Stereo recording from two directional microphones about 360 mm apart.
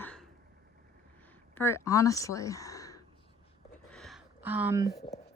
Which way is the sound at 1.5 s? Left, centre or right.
Centre.